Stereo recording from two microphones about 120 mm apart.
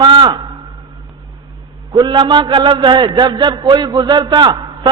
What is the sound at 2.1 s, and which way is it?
A man's voice, 40° right (ahead or behind).